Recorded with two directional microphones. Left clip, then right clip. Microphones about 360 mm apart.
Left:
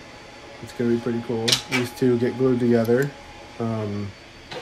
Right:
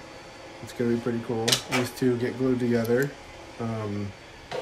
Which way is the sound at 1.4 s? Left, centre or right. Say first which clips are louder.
Left 3 dB; right.